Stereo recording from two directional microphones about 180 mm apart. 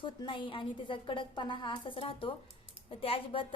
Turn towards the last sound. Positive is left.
turn(degrees=30)  # may be behind; listen again after turning